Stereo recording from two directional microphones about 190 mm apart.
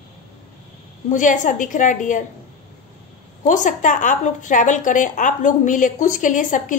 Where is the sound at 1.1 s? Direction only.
40° left (ahead or behind).